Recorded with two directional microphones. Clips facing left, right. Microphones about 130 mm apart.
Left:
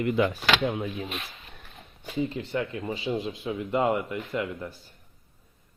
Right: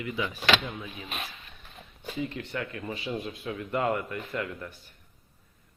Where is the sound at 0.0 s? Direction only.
55° left (ahead or behind).